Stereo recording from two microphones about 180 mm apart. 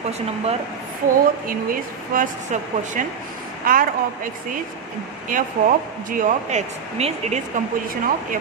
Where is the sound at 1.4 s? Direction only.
50° right (ahead or behind).